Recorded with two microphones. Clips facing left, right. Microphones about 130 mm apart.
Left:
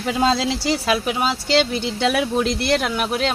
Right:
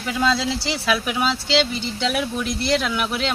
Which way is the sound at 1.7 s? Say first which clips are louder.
Left 4 dB; 65° left (ahead or behind).